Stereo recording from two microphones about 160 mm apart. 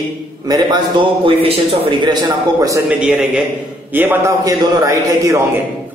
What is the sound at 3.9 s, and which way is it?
Speech, 15° right (ahead or behind).